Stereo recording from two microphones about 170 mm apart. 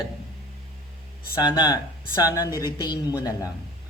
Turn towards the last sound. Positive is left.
turn(degrees=20)  # may be behind; listen again after turning